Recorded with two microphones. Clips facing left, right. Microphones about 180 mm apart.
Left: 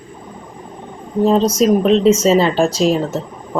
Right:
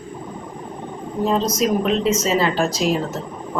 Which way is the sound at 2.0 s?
30° left (ahead or behind).